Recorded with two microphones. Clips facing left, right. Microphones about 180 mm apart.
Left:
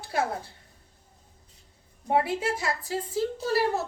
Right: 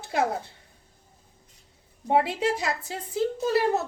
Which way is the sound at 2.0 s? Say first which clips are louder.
Right 2 dB; 25° right (ahead or behind).